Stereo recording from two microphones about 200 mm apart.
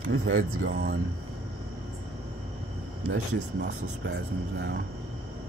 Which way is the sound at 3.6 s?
65° right (ahead or behind).